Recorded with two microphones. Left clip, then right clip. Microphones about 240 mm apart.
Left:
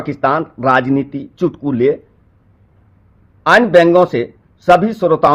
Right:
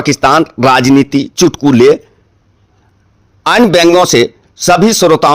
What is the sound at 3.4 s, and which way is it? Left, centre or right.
Speech, right.